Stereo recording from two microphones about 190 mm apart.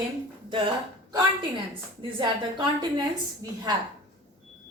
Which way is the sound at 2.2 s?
25° right (ahead or behind).